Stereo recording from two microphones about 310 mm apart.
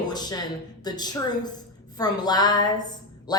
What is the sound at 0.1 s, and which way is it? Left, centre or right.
Speech, centre.